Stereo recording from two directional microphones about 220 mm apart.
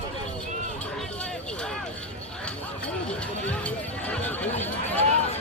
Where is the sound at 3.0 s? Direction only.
5° left (ahead or behind).